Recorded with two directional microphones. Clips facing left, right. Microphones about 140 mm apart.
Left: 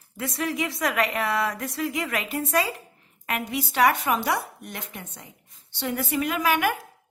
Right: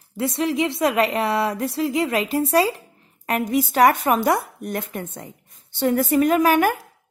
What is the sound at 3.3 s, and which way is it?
Speech, 45° right (ahead or behind).